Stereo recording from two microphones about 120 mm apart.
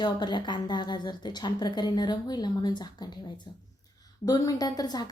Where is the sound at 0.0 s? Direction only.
40° left (ahead or behind).